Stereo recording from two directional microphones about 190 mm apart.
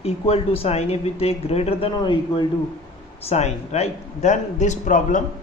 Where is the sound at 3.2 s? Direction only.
35° left (ahead or behind).